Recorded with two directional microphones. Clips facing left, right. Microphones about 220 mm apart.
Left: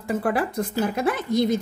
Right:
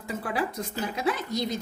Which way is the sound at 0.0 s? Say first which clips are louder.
Left 6 dB; 55° left (ahead or behind).